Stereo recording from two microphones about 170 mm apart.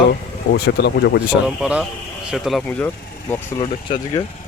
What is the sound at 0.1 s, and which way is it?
Speech, 70° left (ahead or behind).